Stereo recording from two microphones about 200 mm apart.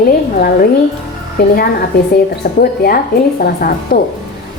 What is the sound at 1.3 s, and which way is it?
A woman's voice, 50° left (ahead or behind).